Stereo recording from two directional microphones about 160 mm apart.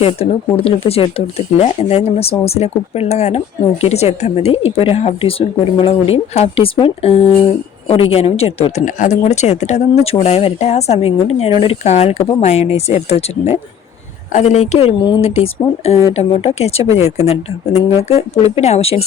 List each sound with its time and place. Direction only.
0.0 s speech: 35° left (ahead or behind)